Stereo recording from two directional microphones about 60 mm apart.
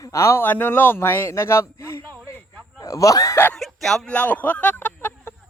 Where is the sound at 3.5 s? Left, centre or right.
Centre.